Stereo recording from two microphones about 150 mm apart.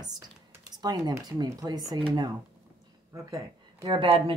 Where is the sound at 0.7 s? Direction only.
25° right (ahead or behind).